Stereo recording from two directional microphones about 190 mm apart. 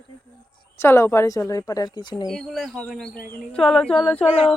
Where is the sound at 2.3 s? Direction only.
Centre (ahead or behind).